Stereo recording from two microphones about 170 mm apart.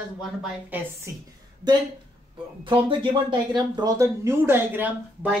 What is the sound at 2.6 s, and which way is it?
Speech, 30° right (ahead or behind).